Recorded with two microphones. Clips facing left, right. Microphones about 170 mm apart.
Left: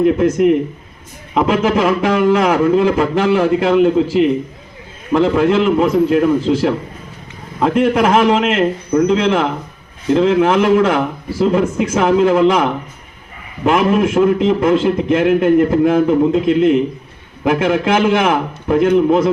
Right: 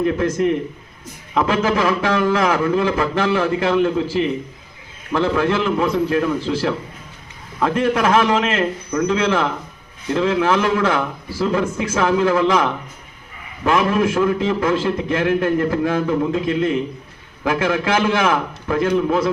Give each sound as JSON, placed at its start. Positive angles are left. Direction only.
{"t": 0.2, "sound": "a man's voice", "side_deg": 15}